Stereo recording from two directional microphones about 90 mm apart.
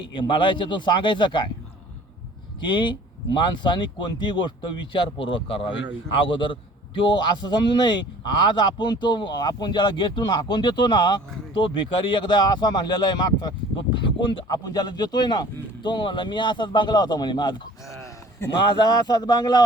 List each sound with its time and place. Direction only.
0.0 s a man's voice: 65° left (ahead or behind)
2.6 s a man's voice: 60° left (ahead or behind)
14.4 s a man's voice: 45° left (ahead or behind)
17.8 s a sound: 35° left (ahead or behind)
18.8 s speech: 55° left (ahead or behind)